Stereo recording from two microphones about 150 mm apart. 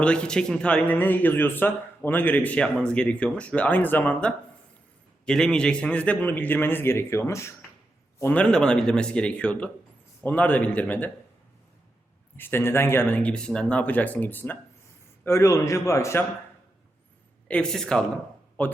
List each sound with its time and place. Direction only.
0.0 s speech: 5° left (ahead or behind)
12.4 s a man's voice: 15° left (ahead or behind)
17.5 s speech: 5° left (ahead or behind)